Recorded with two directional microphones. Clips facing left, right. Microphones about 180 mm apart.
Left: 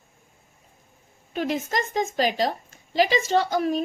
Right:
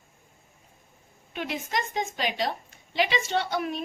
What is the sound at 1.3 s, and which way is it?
A woman's voice, 40° left (ahead or behind).